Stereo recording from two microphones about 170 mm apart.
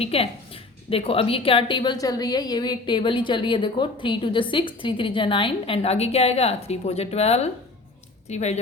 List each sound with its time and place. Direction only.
0.0 s a woman's voice: 35° left (ahead or behind)